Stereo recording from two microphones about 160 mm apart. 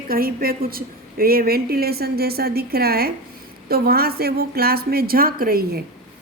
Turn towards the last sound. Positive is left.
turn(degrees=-65)  # may be behind; listen again after turning